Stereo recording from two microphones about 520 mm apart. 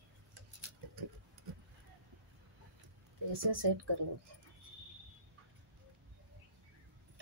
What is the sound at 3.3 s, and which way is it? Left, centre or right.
Speech, right.